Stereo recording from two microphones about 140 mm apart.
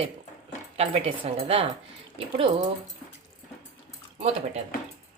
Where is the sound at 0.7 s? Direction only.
45° right (ahead or behind).